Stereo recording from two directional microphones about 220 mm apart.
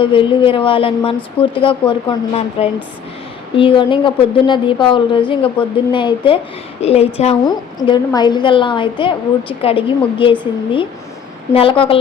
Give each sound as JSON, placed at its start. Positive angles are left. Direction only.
{"t": 0.0, "sound": "a woman's voice", "side_deg": 25}
{"t": 11.5, "sound": "a woman's voice", "side_deg": 25}